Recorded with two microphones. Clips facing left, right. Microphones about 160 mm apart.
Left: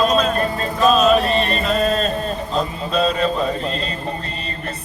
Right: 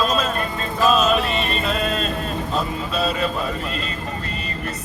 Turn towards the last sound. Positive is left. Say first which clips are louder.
# left 4 dB
turn(degrees=-5)  # may be behind; listen again after turning